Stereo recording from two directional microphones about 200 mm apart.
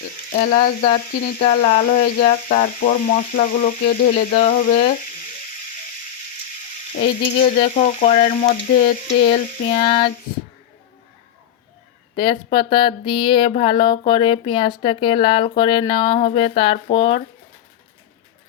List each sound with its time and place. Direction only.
0.3 s speech: 35° left (ahead or behind)
6.9 s speech: 40° left (ahead or behind)
12.1 s speech: 25° left (ahead or behind)